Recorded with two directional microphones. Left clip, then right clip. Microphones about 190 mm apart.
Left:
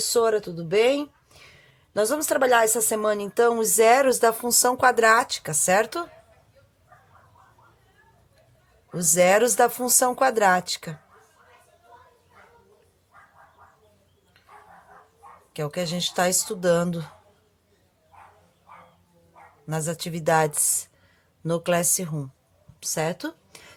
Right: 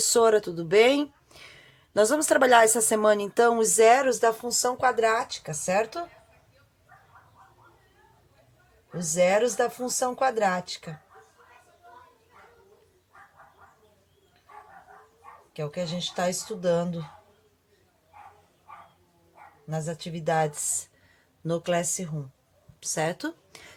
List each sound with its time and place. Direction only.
0.0 s speech: 10° right (ahead or behind); by 6.1 s 40° left (ahead or behind)
9.0 s speech: 40° left (ahead or behind)
15.5 s speech: 40° left (ahead or behind)
19.6 s speech: 40° left (ahead or behind)
21.4 s speech: 20° left (ahead or behind)
22.8 s a woman's voice: 15° left (ahead or behind)